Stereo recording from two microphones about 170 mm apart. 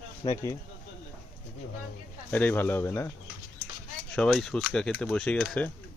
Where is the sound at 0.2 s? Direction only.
25° left (ahead or behind).